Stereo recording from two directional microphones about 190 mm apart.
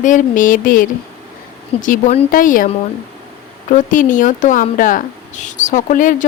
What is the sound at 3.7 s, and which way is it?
Speech, 45° left (ahead or behind).